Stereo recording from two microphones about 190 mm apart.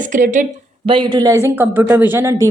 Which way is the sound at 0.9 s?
25° right (ahead or behind).